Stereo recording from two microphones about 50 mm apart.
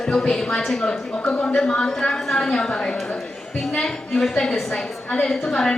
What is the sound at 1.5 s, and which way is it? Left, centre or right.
A woman's voice, centre.